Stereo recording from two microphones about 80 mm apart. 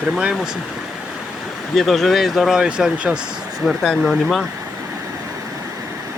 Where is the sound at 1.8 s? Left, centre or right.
Centre.